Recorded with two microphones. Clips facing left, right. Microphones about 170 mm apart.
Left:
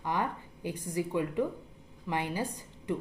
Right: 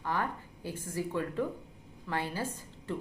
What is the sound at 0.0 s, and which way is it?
A woman's voice, 15° left (ahead or behind).